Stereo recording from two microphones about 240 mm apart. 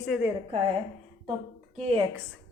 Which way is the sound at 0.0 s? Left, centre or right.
Centre.